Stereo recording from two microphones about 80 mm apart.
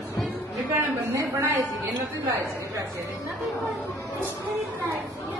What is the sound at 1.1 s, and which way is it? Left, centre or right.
Speech, right.